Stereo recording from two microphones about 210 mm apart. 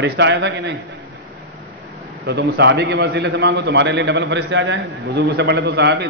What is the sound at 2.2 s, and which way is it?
A man's voice, 50° right (ahead or behind).